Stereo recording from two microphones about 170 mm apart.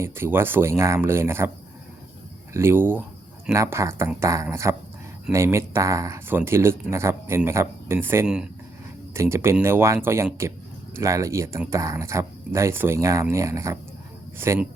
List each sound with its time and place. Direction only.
0.0 s speech: 15° right (ahead or behind)
2.5 s speech: 15° right (ahead or behind)